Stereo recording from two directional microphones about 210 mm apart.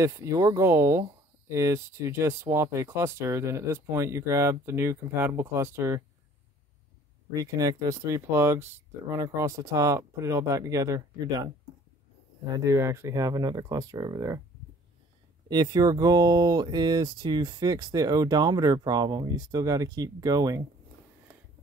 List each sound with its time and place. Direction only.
0.0 s speech: 15° right (ahead or behind)
7.3 s speech: 15° right (ahead or behind)
12.5 s speech: 15° right (ahead or behind)
15.4 s speech: 20° right (ahead or behind)